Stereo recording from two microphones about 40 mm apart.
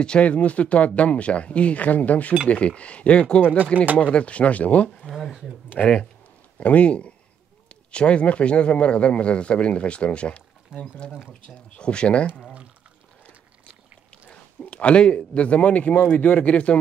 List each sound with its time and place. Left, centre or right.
0.2 s a man's voice: left
3.7 s speech: right
4.0 s a man's voice: left
5.0 s a sound: left
5.8 s a man's voice: left
14.7 s a man's voice: left